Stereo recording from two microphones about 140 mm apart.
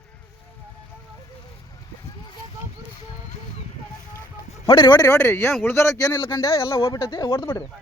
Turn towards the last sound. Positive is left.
turn(degrees=30)  # may be behind; listen again after turning